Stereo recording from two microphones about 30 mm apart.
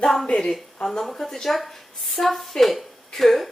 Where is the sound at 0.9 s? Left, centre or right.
Centre.